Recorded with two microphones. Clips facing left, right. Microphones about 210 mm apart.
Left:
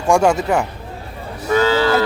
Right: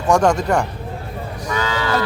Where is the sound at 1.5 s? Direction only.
30° left (ahead or behind).